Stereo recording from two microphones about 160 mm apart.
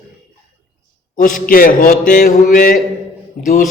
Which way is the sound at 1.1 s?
55° left (ahead or behind).